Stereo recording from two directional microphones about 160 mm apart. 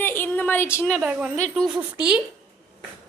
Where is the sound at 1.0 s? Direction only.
5° right (ahead or behind).